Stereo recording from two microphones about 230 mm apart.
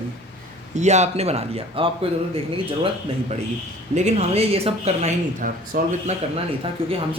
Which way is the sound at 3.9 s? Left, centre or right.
Right.